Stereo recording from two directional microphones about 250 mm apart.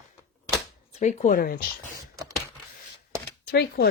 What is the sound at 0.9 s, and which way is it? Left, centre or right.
Speech, left.